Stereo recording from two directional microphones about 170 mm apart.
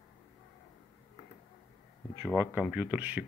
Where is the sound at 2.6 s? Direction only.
10° right (ahead or behind).